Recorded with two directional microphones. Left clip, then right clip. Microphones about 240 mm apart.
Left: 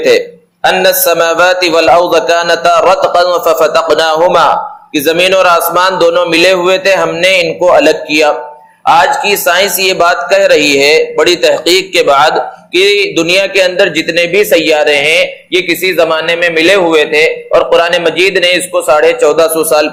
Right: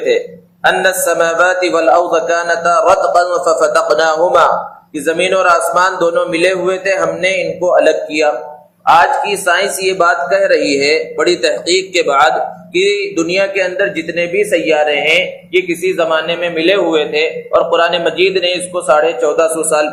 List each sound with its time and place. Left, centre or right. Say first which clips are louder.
0.6 s a man's voice: left 4 dB; left